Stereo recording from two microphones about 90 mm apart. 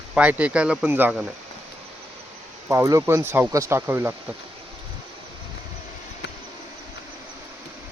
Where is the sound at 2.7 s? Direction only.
35° right (ahead or behind).